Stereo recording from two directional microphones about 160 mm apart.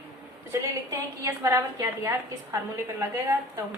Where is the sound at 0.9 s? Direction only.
20° right (ahead or behind).